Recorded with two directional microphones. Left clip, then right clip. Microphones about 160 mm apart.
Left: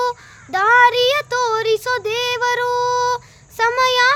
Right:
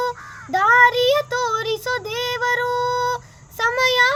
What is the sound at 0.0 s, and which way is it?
Child singing, 20° left (ahead or behind).